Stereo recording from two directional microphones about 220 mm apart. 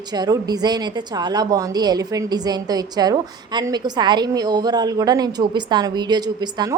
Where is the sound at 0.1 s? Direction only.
20° right (ahead or behind).